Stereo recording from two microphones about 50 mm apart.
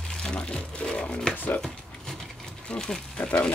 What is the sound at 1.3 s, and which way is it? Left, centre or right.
Speech, left.